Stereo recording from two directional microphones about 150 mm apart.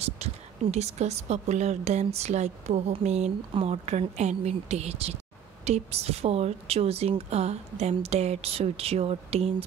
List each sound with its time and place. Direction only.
0.0 s speech: 45° right (ahead or behind)